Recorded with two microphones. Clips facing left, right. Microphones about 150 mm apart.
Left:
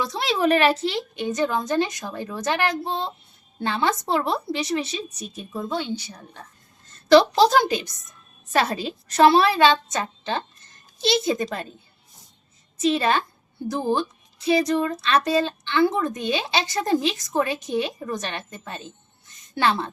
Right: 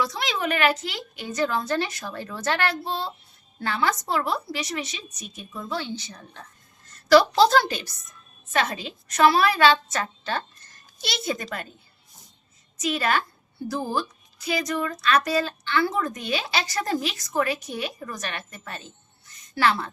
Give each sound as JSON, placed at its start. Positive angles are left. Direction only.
{"t": 0.0, "sound": "speech", "side_deg": 30}
{"t": 6.8, "sound": "a woman's voice", "side_deg": 25}
{"t": 8.5, "sound": "speech", "side_deg": 35}
{"t": 12.7, "sound": "a child's voice", "side_deg": 25}